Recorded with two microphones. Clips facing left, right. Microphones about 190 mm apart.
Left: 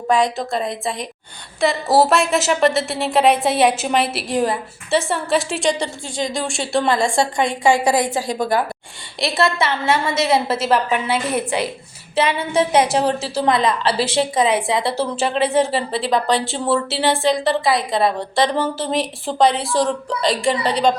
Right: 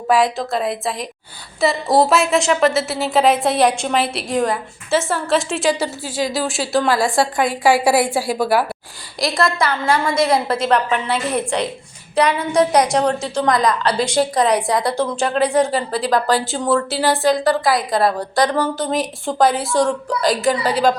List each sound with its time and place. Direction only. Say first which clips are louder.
0.1 s a woman's voice: right 1 dB; centre (ahead or behind)
9.2 s a woman's voice: even; 5° left (ahead or behind)
9.6 s a woman's voice: right 1 dB; 25° left (ahead or behind)
10.2 s a woman's voice: even; 5° left (ahead or behind)
12.5 s a woman's voice: right 1 dB; 25° left (ahead or behind)
14.0 s a woman's voice: right 1 dB; centre (ahead or behind)
18.4 s a woman's voice: right 1 dB; 25° left (ahead or behind)
18.8 s a woman's voice: right 1 dB; centre (ahead or behind)